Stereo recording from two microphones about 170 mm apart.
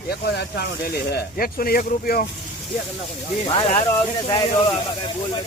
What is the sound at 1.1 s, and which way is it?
Speech, 60° left (ahead or behind).